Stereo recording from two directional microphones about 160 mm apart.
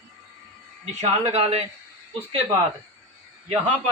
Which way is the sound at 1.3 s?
40° right (ahead or behind).